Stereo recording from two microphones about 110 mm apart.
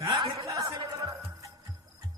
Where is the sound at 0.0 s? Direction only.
30° right (ahead or behind).